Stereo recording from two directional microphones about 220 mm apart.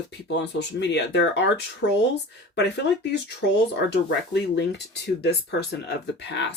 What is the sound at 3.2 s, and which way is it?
Speech, 50° left (ahead or behind).